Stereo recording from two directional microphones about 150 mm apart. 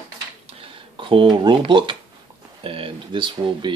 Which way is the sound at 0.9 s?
35° right (ahead or behind).